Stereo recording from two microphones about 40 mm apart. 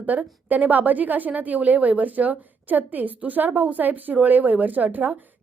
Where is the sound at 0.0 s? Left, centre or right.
Right.